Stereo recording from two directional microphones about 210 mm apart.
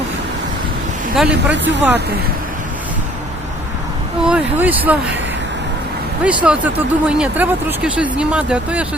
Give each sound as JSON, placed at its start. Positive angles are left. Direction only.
{"t": 1.1, "sound": "speech", "side_deg": -5}
{"t": 1.5, "sound": "speech", "side_deg": -60}
{"t": 4.2, "sound": "speech", "side_deg": -5}
{"t": 6.2, "sound": "speech", "side_deg": -5}